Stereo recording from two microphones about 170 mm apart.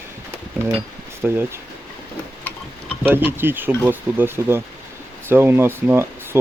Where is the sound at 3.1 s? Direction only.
10° right (ahead or behind).